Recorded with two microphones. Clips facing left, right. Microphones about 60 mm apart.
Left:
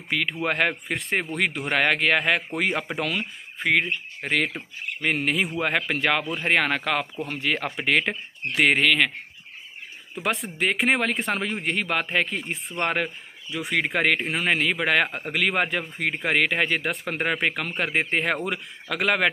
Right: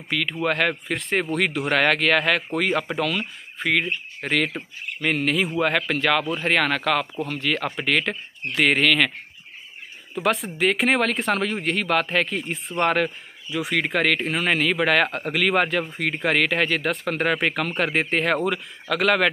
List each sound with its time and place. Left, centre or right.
0.1 s speech: left
7.2 s speech: left
8.6 s speech: centre
10.1 s a man's voice: centre
13.7 s speech: centre